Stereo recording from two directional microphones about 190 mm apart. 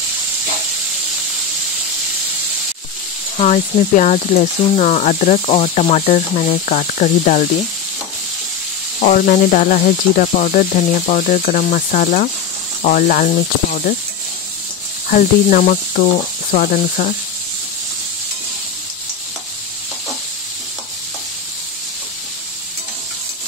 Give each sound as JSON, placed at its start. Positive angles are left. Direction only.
{"t": 3.3, "sound": "speech", "side_deg": 35}
{"t": 9.0, "sound": "speech", "side_deg": 45}
{"t": 15.0, "sound": "speech", "side_deg": 45}